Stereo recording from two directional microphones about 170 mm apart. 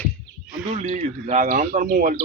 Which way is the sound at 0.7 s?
40° right (ahead or behind).